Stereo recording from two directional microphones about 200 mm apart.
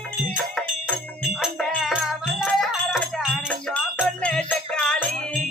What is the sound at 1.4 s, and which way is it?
Music, 5° right (ahead or behind).